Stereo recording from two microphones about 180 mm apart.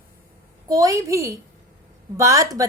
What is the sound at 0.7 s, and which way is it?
A woman's voice, 20° right (ahead or behind).